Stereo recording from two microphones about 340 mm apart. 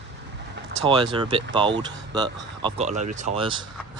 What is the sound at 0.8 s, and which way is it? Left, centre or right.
Speech, centre.